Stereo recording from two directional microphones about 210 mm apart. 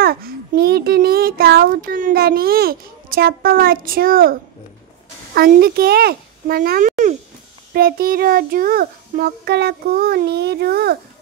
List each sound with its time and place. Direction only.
0.0 s a child's voice: 45° right (ahead or behind)